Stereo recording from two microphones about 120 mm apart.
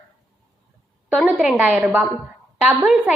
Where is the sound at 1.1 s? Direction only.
5° right (ahead or behind).